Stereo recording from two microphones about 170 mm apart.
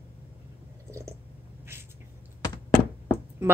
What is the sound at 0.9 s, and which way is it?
Squish, 15° right (ahead or behind).